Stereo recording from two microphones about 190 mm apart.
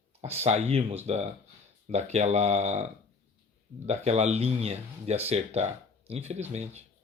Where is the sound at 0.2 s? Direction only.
35° right (ahead or behind).